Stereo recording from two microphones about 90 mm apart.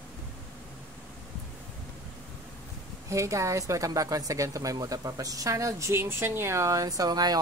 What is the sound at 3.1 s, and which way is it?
A man's voice, 35° right (ahead or behind).